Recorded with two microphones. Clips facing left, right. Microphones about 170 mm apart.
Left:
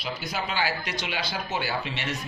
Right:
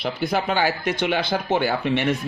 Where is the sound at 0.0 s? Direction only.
55° right (ahead or behind).